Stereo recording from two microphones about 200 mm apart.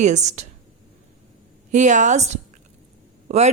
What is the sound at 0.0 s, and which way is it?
Speech, 35° right (ahead or behind).